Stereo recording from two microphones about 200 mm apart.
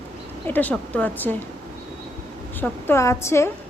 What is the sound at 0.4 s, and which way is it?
Speech, 10° left (ahead or behind).